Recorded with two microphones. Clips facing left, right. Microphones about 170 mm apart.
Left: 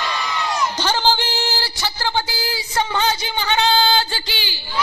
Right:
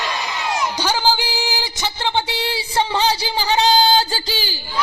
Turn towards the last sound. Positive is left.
turn(degrees=-40)  # may be behind; listen again after turning